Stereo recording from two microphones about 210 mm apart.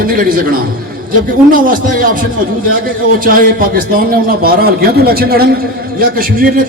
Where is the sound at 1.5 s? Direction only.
40° right (ahead or behind).